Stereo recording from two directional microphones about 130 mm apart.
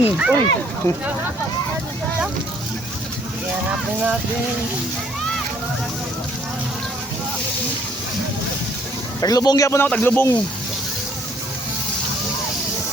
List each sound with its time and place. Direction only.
0.0 s speech: 10° right (ahead or behind)
0.8 s speech: 20° left (ahead or behind)
3.7 s speech: 5° right (ahead or behind)
9.2 s speech: 30° left (ahead or behind)